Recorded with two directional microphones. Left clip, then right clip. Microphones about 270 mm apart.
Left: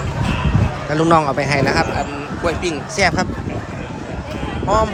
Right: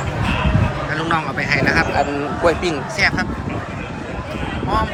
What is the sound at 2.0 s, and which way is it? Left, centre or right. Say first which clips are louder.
Speech: right 5 dB; centre.